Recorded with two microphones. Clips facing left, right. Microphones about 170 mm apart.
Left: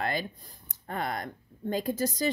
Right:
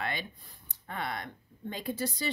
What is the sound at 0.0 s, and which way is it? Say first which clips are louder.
Speech: left 5 dB; 40° left (ahead or behind).